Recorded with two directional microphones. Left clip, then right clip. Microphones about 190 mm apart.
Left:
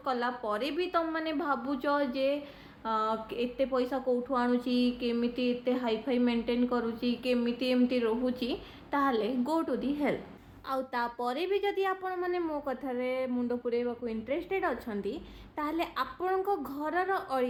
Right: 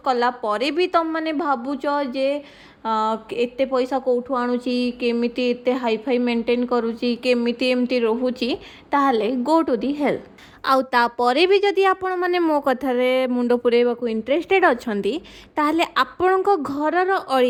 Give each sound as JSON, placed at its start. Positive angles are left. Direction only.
{"t": 0.0, "sound": "a woman's voice", "side_deg": -40}